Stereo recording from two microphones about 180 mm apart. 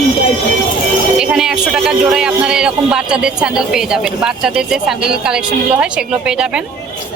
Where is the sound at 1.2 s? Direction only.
5° right (ahead or behind).